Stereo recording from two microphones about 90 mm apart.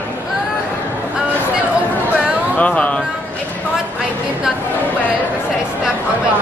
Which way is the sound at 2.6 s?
15° left (ahead or behind).